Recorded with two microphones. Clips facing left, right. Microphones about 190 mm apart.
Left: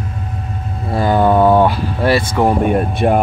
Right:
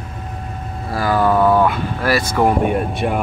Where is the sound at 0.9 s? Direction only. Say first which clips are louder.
Left 3 dB; 25° left (ahead or behind).